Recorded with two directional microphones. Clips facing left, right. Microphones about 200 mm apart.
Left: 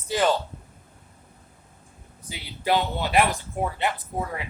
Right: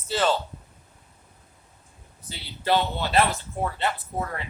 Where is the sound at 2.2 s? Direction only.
15° left (ahead or behind).